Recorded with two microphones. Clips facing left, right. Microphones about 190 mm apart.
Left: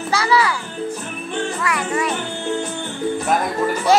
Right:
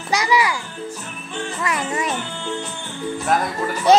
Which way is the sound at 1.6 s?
20° right (ahead or behind).